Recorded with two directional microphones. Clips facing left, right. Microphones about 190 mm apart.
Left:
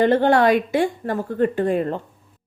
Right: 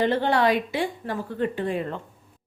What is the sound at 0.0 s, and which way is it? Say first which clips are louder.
A woman's voice: left 6 dB; 50° left (ahead or behind).